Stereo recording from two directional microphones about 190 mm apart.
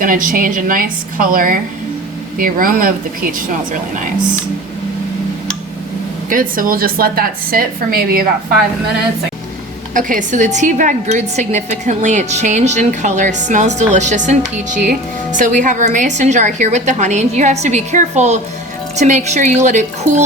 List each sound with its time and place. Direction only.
0.0 s a woman's voice: 45° right (ahead or behind)
6.3 s a woman's voice: 45° right (ahead or behind)
10.1 s a woman's voice: 40° right (ahead or behind)